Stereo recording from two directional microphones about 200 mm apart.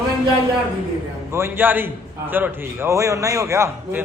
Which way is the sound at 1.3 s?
10° right (ahead or behind).